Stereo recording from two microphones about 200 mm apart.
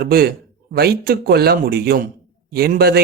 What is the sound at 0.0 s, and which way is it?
Speech, 50° right (ahead or behind).